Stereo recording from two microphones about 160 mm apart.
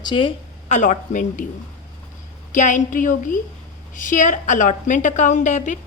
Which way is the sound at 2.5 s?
50° left (ahead or behind).